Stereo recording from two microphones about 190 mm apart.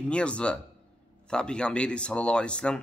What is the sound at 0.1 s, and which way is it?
A man's voice, 5° left (ahead or behind).